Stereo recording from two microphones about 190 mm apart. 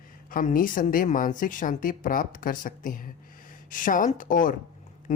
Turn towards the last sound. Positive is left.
turn(degrees=45)  # may be behind; listen again after turning